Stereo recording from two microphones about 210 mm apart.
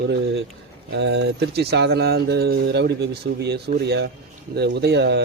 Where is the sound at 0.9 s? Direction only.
55° right (ahead or behind).